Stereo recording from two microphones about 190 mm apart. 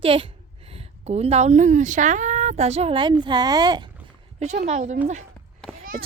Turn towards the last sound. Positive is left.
turn(degrees=-35)  # may be behind; listen again after turning